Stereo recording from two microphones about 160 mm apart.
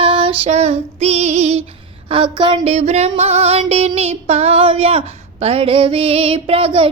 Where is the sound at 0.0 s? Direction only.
35° right (ahead or behind).